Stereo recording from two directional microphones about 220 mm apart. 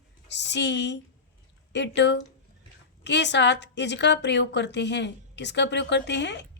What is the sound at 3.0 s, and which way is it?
A woman's voice, 50° left (ahead or behind).